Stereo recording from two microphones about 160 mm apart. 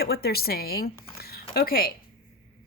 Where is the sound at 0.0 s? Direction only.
75° left (ahead or behind).